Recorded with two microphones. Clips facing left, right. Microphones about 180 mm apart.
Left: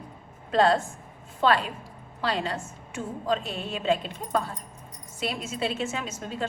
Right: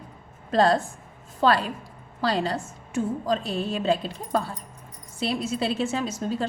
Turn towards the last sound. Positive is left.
turn(degrees=-35)  # may be behind; listen again after turning